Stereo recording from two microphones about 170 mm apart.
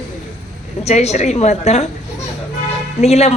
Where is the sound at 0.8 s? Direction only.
40° left (ahead or behind).